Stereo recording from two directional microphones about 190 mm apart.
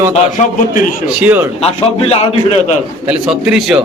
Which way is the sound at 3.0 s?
5° right (ahead or behind).